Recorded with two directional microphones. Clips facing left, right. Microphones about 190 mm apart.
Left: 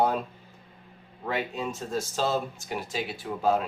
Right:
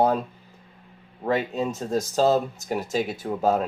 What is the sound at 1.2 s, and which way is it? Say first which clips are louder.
Speech: right 6 dB; 40° right (ahead or behind).